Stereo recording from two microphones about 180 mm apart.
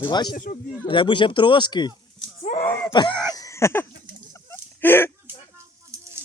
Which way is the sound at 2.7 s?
10° left (ahead or behind).